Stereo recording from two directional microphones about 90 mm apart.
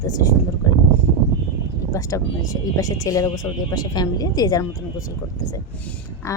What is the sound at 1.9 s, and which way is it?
Speech, 35° left (ahead or behind).